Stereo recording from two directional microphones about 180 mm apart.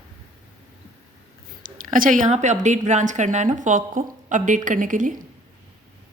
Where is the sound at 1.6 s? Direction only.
50° right (ahead or behind).